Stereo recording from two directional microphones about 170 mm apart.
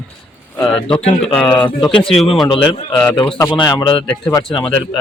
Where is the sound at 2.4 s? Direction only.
35° left (ahead or behind).